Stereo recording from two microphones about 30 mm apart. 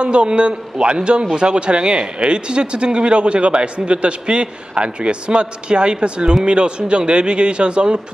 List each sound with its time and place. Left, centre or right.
0.0 s speech: right